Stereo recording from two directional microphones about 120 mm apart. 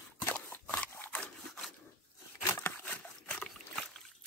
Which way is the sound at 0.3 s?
15° left (ahead or behind).